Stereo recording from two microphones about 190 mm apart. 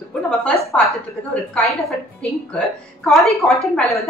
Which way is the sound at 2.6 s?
Centre (ahead or behind).